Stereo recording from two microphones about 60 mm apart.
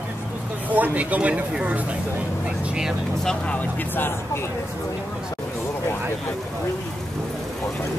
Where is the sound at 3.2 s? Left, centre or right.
Centre.